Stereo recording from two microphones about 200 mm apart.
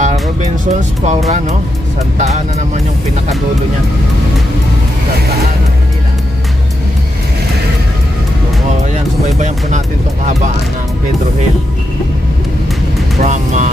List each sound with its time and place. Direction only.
0.0 s speech: 35° right (ahead or behind)
2.1 s speech: 35° right (ahead or behind)
13.2 s speech: 35° right (ahead or behind)